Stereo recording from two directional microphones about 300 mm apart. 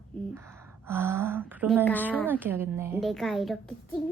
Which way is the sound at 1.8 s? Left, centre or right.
Centre.